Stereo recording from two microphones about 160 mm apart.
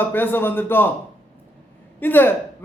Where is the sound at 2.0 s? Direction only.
10° left (ahead or behind).